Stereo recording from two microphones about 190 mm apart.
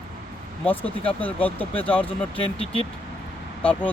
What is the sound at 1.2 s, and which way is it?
Speech, 10° left (ahead or behind).